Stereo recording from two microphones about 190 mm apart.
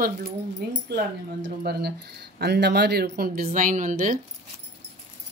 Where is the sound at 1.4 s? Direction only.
55° right (ahead or behind).